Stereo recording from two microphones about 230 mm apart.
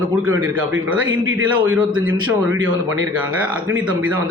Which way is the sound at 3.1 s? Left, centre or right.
Centre.